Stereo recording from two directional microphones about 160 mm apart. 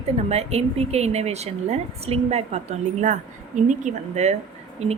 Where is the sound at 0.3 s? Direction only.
40° right (ahead or behind).